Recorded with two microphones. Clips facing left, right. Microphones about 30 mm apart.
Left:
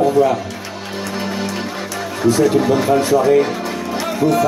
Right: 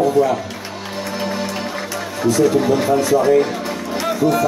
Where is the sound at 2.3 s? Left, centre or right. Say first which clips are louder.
Left 1 dB; left.